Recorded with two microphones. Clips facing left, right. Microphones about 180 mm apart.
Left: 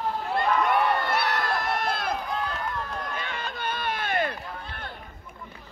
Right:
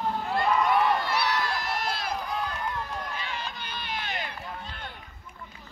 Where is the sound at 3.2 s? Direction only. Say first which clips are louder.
Left 3 dB; 55° left (ahead or behind).